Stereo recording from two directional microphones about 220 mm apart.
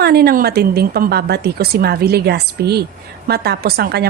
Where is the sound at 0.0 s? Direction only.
45° right (ahead or behind).